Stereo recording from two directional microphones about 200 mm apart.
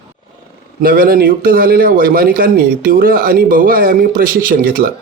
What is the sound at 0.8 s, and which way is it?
A man's voice, 45° right (ahead or behind).